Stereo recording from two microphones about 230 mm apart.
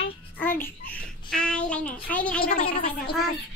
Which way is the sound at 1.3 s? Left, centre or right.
Centre.